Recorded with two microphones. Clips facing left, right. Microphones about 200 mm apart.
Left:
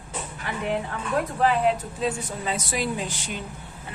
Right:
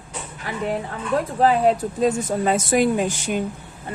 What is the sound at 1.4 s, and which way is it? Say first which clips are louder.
Speech: right 5 dB; 40° right (ahead or behind).